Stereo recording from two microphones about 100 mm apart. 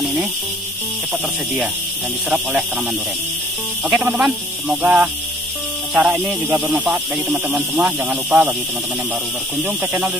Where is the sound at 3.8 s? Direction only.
15° right (ahead or behind).